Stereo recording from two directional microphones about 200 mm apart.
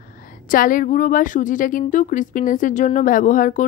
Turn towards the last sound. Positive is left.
turn(degrees=40)  # may be behind; listen again after turning